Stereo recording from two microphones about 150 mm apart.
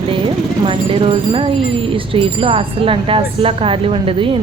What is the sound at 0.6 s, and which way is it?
Speech, 35° right (ahead or behind).